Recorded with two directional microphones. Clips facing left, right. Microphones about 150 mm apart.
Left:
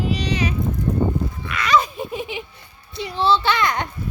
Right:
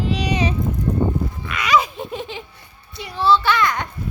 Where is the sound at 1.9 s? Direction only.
5° left (ahead or behind); by 3.9 s 25° left (ahead or behind).